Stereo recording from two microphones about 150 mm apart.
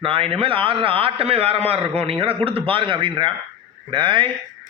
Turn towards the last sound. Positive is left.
turn(degrees=-30)  # may be behind; listen again after turning